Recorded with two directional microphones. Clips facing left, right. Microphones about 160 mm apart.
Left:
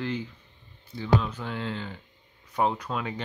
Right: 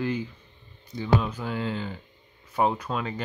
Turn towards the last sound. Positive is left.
turn(degrees=0)  # may be behind; listen again after turning